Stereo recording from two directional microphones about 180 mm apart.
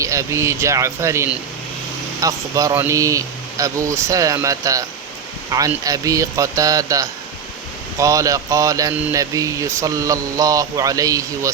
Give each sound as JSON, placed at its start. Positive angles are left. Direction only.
{"t": 0.0, "sound": "speech", "side_deg": -15}